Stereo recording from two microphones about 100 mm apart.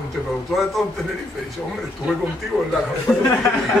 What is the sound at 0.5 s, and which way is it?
Speech, centre (ahead or behind).